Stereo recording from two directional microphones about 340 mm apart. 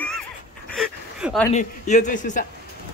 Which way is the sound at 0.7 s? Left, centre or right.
Centre.